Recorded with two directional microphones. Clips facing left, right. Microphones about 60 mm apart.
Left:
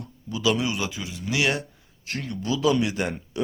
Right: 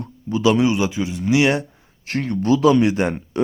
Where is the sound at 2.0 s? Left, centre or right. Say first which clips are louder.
Right 9 dB; right.